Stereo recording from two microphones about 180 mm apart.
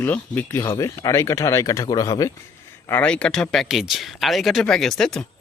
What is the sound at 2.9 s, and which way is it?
Speech, 10° left (ahead or behind).